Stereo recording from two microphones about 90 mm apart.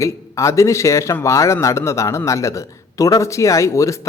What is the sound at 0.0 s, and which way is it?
A man's voice, 35° left (ahead or behind).